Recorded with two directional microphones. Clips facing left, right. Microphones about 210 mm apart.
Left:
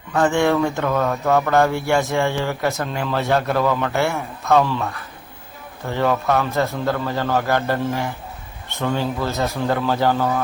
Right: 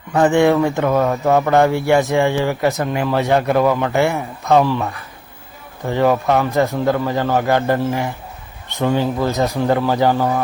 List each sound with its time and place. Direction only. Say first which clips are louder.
0.1 s speech: right 4 dB; 20° right (ahead or behind)